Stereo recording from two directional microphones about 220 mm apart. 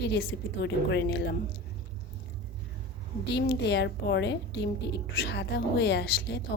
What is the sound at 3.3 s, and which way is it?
A woman's voice, 50° left (ahead or behind).